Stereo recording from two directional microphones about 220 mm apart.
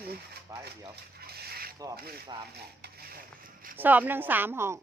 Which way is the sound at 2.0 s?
45° right (ahead or behind).